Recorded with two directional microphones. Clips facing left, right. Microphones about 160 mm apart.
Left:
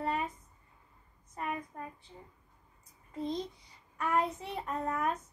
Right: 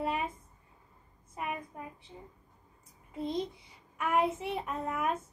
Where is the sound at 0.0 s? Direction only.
15° right (ahead or behind).